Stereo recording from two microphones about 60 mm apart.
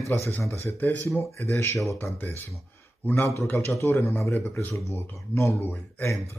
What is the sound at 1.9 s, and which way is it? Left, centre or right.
Speech, left.